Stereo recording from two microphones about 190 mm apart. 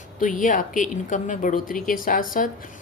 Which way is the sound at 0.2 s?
45° left (ahead or behind).